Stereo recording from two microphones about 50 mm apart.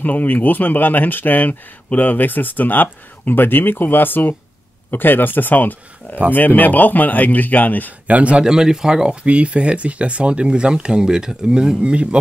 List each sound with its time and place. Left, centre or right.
0.0 s speech: left
8.1 s a man's voice: right
8.5 s a man's voice: centre